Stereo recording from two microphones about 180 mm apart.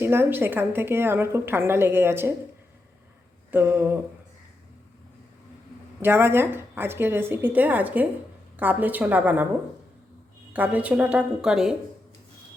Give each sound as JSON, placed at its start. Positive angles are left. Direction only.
{"t": 0.0, "sound": "a woman's voice", "side_deg": -15}
{"t": 3.5, "sound": "a woman's voice", "side_deg": -10}
{"t": 6.0, "sound": "a woman's voice", "side_deg": -15}
{"t": 10.5, "sound": "a woman's voice", "side_deg": -10}